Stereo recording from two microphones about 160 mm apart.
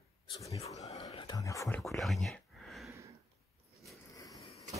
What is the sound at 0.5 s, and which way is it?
Speech, 40° left (ahead or behind).